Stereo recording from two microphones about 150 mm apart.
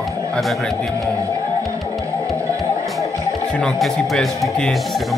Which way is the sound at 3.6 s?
5° left (ahead or behind).